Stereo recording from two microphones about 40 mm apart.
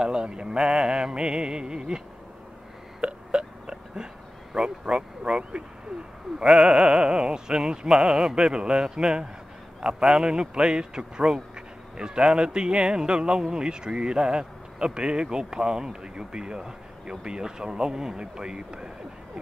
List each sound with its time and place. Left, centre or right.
0.0 s a man's voice: right
3.0 s hiccup: right
4.6 s a man's voice: right